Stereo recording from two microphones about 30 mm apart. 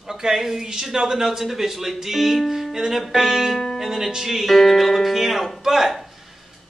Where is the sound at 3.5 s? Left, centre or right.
Centre.